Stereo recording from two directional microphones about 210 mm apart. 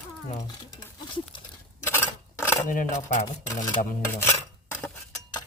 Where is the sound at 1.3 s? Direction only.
25° left (ahead or behind).